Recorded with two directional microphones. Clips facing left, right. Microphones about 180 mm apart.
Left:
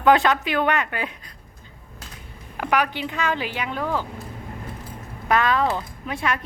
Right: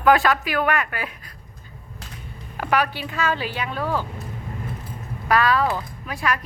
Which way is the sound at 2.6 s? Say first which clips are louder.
Even; 15° left (ahead or behind).